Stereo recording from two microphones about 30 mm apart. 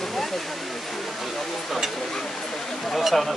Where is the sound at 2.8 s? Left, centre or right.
Centre.